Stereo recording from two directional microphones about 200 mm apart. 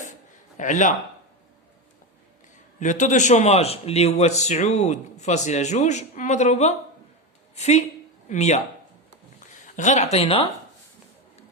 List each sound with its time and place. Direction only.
0.0 s a sound: 40° left (ahead or behind)
2.8 s a man's voice: 40° left (ahead or behind)
9.7 s a man's voice: 35° left (ahead or behind)